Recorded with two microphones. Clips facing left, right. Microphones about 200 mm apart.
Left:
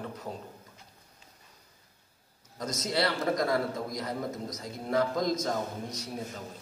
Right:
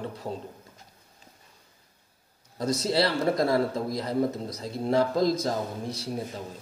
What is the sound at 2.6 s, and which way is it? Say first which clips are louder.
A man's voice: right 5 dB; 30° right (ahead or behind).